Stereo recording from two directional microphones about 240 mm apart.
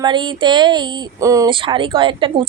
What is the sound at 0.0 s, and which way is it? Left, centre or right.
Speech, centre.